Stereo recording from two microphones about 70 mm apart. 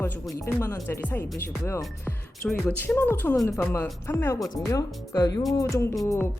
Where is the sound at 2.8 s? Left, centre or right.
Left.